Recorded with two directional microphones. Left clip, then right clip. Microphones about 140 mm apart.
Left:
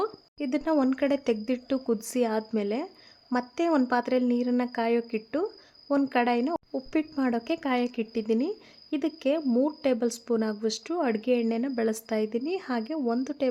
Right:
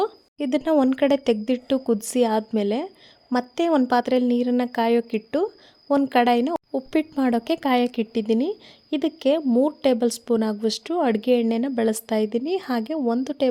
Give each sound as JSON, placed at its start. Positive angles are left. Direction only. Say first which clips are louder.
{"t": 0.0, "sound": "a woman's voice", "louder": "right 6 dB", "side_deg": -35}